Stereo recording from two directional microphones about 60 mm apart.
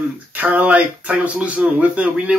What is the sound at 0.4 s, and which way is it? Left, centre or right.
Speech, right.